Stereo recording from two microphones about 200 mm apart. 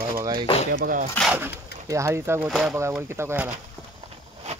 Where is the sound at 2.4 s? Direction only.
Centre (ahead or behind).